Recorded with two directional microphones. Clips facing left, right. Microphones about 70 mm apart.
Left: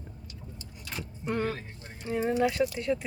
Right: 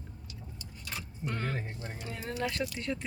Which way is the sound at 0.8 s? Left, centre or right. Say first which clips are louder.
Left 3 dB; centre.